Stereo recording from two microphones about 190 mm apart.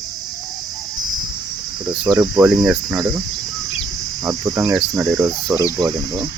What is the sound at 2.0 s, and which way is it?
Speech, 20° right (ahead or behind).